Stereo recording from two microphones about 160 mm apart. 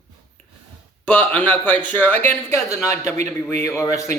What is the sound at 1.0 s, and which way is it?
A man's voice, 10° left (ahead or behind).